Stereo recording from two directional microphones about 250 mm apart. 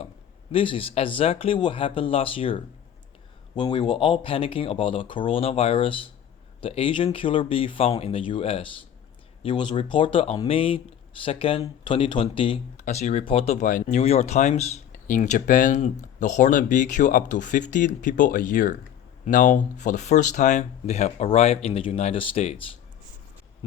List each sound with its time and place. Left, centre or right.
0.5 s speech: left